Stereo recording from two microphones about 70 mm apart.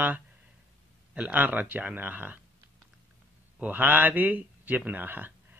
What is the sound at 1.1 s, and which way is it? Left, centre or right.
Speech, right.